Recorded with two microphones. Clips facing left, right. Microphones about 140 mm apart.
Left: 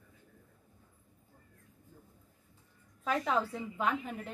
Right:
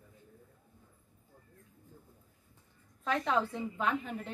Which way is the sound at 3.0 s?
5° left (ahead or behind).